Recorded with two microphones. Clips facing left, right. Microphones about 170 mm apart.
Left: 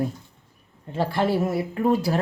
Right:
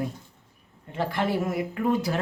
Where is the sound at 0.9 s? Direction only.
30° left (ahead or behind).